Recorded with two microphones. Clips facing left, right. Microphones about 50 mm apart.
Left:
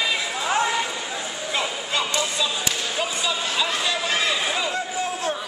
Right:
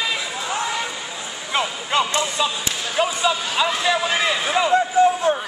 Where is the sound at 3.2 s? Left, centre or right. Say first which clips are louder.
Right 4 dB; centre.